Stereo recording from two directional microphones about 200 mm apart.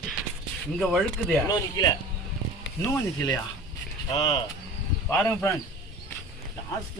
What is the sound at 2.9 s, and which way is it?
Speech, 15° left (ahead or behind).